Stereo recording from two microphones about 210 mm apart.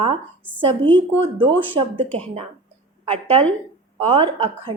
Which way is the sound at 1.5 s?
25° right (ahead or behind).